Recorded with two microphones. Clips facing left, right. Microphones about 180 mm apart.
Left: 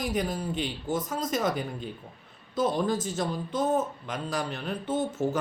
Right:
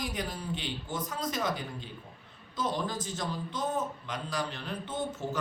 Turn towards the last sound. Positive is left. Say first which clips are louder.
# left 7 dB
turn(degrees=50)  # may be behind; listen again after turning